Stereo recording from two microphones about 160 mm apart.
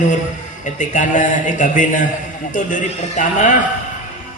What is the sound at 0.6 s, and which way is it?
A man's voice, 50° left (ahead or behind).